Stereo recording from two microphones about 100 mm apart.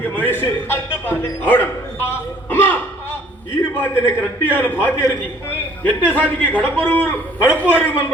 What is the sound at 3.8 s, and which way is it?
A man's voice, 20° left (ahead or behind).